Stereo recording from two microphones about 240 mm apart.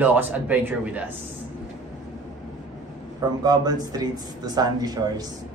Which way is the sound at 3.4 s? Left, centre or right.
Centre.